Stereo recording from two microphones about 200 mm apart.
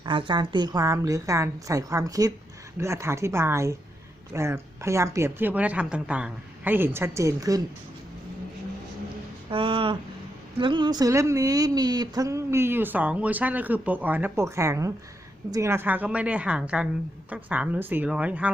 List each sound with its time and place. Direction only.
0.0 s a woman's voice: 25° right (ahead or behind)
9.5 s a woman's voice: 25° right (ahead or behind); by 18.5 s 5° right (ahead or behind)